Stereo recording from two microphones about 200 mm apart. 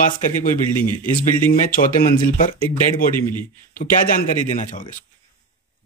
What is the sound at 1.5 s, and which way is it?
Speech, 45° left (ahead or behind).